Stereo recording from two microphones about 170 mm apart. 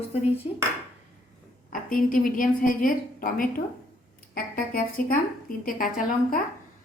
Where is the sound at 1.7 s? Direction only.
55° left (ahead or behind).